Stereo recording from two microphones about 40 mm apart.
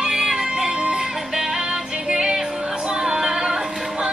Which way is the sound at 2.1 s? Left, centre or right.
Centre.